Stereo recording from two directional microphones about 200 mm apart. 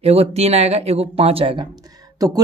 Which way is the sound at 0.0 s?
30° right (ahead or behind).